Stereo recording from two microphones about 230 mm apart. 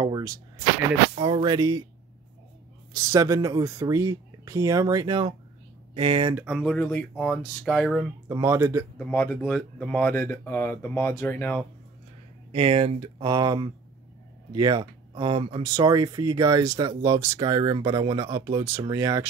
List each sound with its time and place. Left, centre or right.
0.0 s a sound: centre
1.1 s speech: right
2.9 s speech: centre
6.3 s speech: centre
8.3 s speech: centre
8.9 s speech: centre
12.5 s speech: right